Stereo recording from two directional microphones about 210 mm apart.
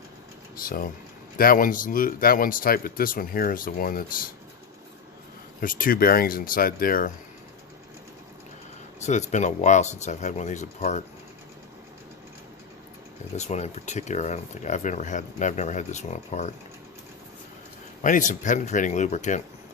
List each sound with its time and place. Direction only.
0.6 s speech: 45° left (ahead or behind)
5.5 s speech: 40° left (ahead or behind)
9.0 s speech: 35° left (ahead or behind)
13.3 s speech: 30° left (ahead or behind)
18.0 s speech: 35° left (ahead or behind)